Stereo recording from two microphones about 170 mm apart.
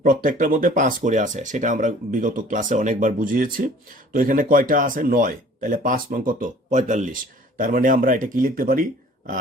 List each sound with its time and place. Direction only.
0.0 s speech: 55° right (ahead or behind)